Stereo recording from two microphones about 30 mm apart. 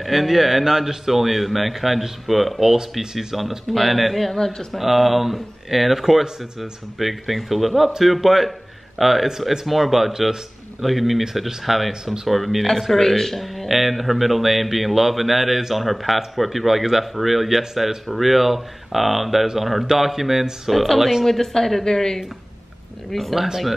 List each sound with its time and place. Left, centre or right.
0.0 s a man's voice: centre
3.7 s a man's voice: centre
4.3 s speech: centre
4.7 s a man's voice: centre
12.9 s speech: centre
13.4 s a man's voice: centre
20.7 s a man's voice: centre
21.3 s speech: centre
23.3 s speech: centre